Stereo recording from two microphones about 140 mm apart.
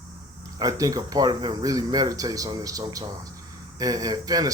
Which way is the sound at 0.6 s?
25° right (ahead or behind).